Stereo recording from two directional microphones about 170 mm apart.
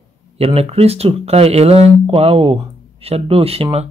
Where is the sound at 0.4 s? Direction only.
35° right (ahead or behind).